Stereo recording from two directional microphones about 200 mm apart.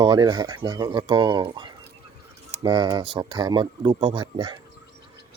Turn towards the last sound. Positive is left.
turn(degrees=-25)  # may be behind; listen again after turning